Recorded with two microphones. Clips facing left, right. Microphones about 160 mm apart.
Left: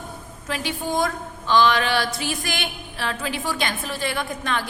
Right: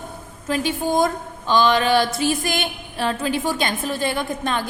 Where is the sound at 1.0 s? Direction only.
20° right (ahead or behind).